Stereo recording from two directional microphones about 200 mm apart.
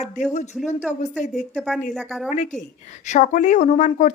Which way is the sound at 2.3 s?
35° left (ahead or behind).